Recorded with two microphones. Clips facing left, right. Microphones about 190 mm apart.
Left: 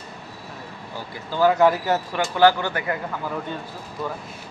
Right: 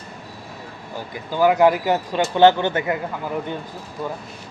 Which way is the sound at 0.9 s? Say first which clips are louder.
Right 2 dB; 15° right (ahead or behind).